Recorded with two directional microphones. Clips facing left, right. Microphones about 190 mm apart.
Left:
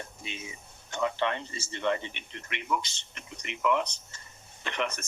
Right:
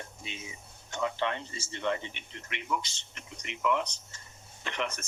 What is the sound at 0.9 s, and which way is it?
Speech, 65° left (ahead or behind).